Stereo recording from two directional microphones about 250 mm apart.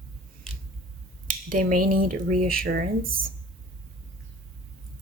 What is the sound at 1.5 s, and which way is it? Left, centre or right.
Speech, right.